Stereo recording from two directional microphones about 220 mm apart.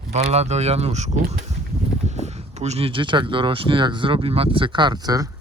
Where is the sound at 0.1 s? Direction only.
30° right (ahead or behind).